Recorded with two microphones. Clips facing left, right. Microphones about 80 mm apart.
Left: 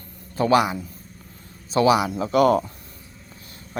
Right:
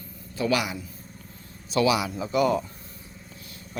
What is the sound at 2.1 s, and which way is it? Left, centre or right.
Speech, left.